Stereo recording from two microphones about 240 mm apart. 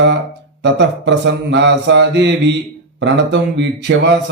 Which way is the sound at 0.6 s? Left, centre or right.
Right.